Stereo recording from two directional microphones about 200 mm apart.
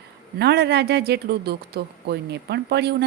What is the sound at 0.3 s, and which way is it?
Speech, 55° right (ahead or behind).